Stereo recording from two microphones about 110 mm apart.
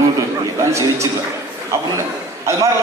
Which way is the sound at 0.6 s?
25° right (ahead or behind).